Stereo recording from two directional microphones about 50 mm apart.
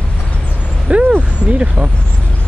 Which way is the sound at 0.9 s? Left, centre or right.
Right.